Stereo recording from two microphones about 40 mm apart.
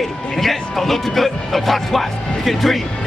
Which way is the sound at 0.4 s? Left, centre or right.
Centre.